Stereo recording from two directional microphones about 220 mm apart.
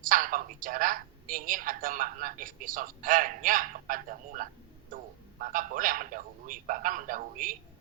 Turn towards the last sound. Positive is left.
turn(degrees=-40)  # may be behind; listen again after turning